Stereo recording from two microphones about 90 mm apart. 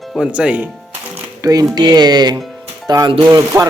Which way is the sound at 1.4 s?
45° right (ahead or behind).